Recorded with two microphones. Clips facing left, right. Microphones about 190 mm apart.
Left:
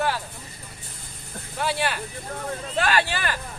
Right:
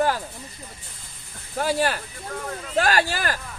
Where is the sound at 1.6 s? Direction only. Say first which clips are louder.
Right 3 dB; 40° right (ahead or behind).